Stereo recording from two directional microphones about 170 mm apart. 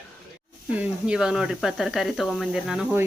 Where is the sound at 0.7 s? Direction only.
5° right (ahead or behind).